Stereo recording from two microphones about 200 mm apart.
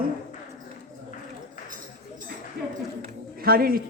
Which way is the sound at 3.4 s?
50° right (ahead or behind).